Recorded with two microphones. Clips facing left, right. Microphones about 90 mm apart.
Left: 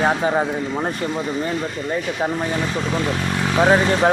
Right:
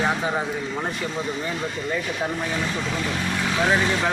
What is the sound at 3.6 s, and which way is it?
Speech, 35° left (ahead or behind).